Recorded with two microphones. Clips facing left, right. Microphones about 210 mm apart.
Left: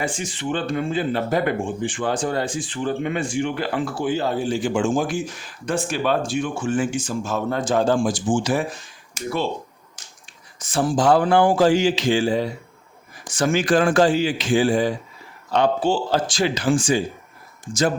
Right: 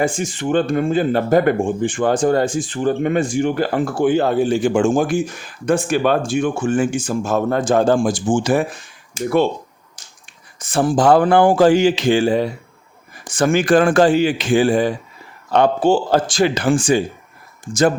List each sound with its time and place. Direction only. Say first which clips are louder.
0.0 s speech: right 6 dB; 45° right (ahead or behind)
10.6 s speech: right 4 dB; 55° right (ahead or behind)